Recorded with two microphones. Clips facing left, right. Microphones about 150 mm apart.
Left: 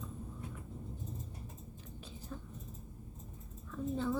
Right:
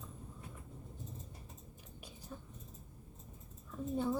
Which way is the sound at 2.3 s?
15° right (ahead or behind).